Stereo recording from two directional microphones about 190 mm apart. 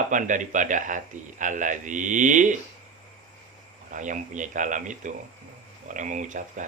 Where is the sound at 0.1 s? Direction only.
40° right (ahead or behind).